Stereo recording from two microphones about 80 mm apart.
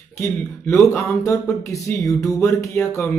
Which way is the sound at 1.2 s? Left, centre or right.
Left.